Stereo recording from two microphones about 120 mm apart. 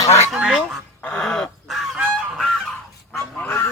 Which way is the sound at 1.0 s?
5° left (ahead or behind).